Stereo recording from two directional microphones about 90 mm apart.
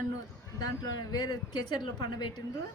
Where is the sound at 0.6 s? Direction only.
45° left (ahead or behind).